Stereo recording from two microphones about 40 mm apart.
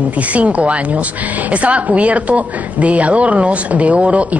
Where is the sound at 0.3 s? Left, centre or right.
Right.